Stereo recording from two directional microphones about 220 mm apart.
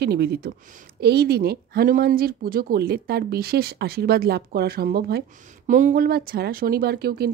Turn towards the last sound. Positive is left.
turn(degrees=-45)  # may be behind; listen again after turning